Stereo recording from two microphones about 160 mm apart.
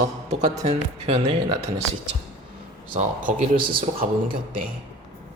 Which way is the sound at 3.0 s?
60° right (ahead or behind).